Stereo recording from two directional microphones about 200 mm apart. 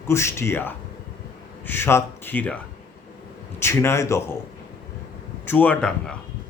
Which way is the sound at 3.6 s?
10° left (ahead or behind).